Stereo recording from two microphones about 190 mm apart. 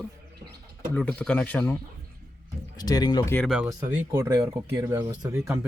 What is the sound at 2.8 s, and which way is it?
Speech, 20° left (ahead or behind).